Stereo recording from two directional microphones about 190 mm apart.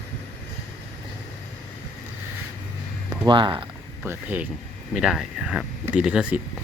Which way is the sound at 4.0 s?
10° right (ahead or behind).